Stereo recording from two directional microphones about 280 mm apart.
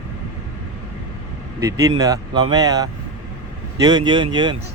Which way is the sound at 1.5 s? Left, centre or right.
Centre.